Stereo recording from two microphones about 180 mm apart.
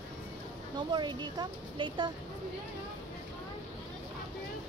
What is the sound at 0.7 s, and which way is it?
Speech, 25° right (ahead or behind).